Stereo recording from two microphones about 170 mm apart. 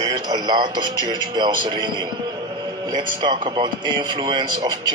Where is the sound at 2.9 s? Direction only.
25° right (ahead or behind).